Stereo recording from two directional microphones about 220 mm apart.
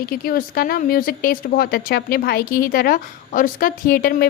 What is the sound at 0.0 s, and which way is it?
Speech, 40° left (ahead or behind).